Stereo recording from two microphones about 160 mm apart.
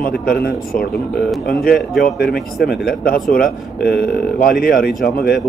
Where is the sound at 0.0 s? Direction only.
65° left (ahead or behind).